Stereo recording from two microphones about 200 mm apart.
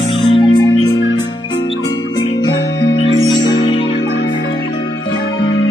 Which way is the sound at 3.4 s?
20° left (ahead or behind).